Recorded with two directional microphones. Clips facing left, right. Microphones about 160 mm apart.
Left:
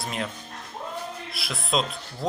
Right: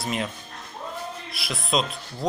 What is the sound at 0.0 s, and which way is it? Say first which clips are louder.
Speech: right 3 dB; centre (ahead or behind).